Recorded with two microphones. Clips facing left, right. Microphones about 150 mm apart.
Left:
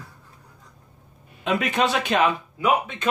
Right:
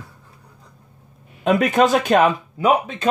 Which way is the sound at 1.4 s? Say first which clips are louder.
Right 7 dB; 45° right (ahead or behind).